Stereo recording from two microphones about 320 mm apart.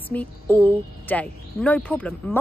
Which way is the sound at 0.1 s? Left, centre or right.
Centre.